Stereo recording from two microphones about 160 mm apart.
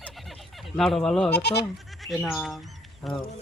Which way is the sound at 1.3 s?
90° left.